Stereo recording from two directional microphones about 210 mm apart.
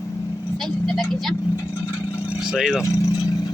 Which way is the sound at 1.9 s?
10° left (ahead or behind).